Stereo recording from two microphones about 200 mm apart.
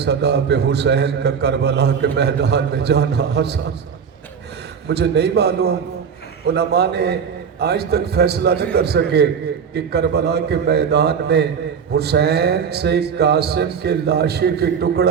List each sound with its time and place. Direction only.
0.0 s a man's voice: 55° right (ahead or behind)
4.9 s a man's voice: 55° right (ahead or behind)